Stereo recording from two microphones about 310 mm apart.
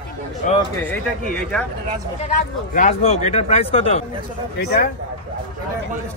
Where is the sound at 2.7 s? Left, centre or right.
Left.